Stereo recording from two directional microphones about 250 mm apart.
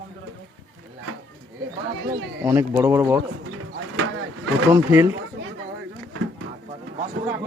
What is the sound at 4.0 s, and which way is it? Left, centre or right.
Vehicle, right.